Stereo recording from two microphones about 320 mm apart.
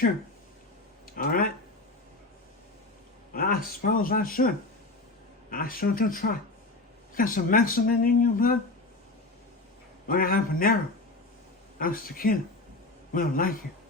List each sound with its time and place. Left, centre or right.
1.1 s speech: left
3.3 s speech: left
10.1 s speech: left
11.8 s speech: left